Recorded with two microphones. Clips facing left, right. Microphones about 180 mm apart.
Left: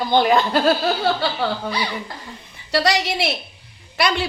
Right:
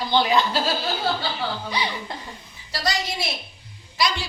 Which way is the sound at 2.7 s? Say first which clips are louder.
Left 7 dB; 70° left (ahead or behind).